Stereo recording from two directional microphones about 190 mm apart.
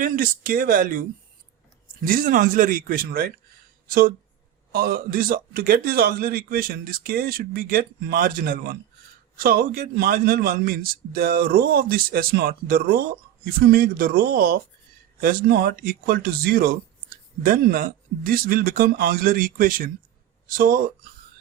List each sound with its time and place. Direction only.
0.0 s a man's voice: 50° right (ahead or behind)
2.0 s a man's voice: 45° right (ahead or behind)